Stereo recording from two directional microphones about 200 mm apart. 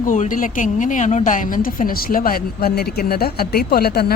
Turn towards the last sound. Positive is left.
turn(degrees=50)  # may be behind; listen again after turning